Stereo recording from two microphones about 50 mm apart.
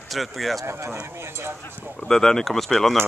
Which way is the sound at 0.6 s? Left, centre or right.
Right.